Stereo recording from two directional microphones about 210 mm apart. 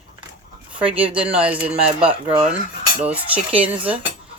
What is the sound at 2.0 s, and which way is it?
Speech, 25° right (ahead or behind).